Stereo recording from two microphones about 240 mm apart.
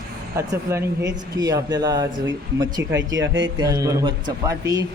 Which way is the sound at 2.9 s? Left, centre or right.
Right.